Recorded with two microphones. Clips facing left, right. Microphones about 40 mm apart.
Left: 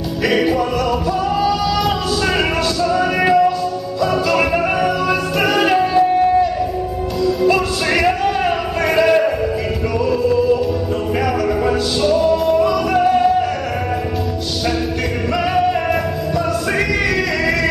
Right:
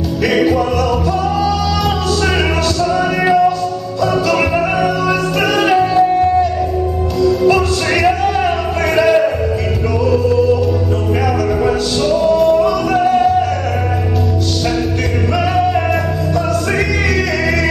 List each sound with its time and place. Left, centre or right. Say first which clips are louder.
0.2 s music: right 2 dB; centre
15.3 s music: right 1 dB; centre